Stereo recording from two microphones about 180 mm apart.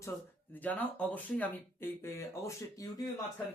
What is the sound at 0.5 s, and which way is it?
Speech, 10° left (ahead or behind).